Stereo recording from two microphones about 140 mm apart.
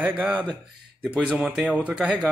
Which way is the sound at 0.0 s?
10° right (ahead or behind).